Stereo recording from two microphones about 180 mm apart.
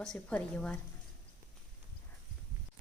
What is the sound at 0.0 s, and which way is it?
Speech, 5° left (ahead or behind).